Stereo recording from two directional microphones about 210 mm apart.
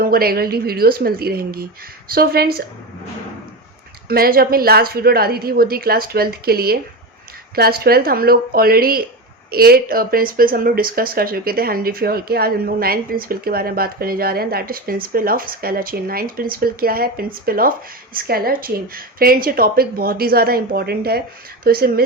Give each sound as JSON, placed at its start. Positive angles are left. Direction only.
{"t": 0.0, "sound": "speech", "side_deg": -45}
{"t": 4.1, "sound": "speech", "side_deg": -45}